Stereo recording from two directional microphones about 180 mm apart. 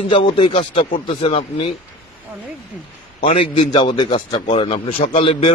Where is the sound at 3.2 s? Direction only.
30° left (ahead or behind).